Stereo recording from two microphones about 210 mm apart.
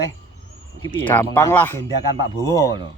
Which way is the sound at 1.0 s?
10° left (ahead or behind).